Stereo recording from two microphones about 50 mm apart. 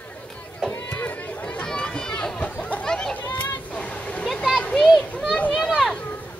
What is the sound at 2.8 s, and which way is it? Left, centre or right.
Children playing, centre.